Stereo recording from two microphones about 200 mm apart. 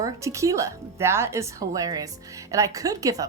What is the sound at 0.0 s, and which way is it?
Speech, 15° right (ahead or behind).